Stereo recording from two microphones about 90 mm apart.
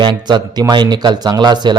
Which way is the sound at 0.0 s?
55° right (ahead or behind).